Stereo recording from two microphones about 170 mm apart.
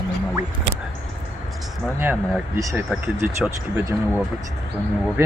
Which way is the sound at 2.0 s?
10° right (ahead or behind).